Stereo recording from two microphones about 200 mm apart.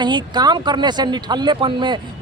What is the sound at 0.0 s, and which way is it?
Speech, 20° right (ahead or behind).